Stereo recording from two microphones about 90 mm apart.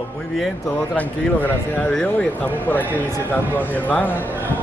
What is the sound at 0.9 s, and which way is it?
Speech, 15° left (ahead or behind).